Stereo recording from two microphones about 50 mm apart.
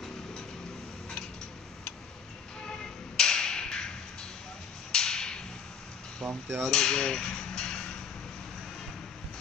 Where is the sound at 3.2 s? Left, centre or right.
Centre.